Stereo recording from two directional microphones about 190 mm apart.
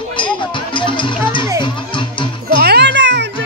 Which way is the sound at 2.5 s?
60° right (ahead or behind).